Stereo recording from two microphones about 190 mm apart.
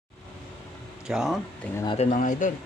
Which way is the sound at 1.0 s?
Centre (ahead or behind).